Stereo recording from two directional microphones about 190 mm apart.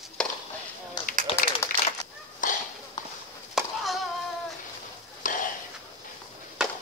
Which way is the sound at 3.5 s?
Centre (ahead or behind).